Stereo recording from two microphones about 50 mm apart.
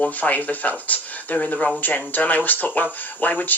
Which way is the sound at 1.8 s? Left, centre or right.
Left.